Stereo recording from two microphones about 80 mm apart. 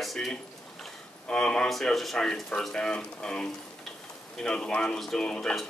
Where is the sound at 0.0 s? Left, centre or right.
Centre.